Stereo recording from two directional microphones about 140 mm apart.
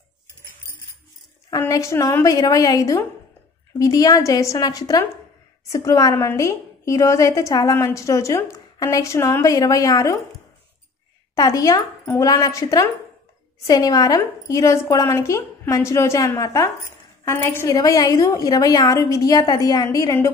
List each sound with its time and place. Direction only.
1.6 s a woman's voice: 20° left (ahead or behind)
11.3 s a woman's voice: 25° left (ahead or behind)